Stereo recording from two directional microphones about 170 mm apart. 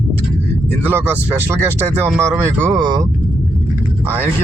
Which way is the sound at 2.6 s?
25° right (ahead or behind).